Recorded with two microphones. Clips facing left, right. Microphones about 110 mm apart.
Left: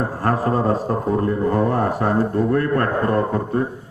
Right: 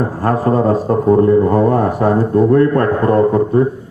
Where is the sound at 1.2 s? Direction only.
20° right (ahead or behind).